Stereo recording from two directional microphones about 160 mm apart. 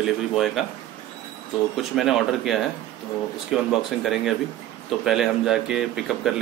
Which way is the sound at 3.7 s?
Centre (ahead or behind).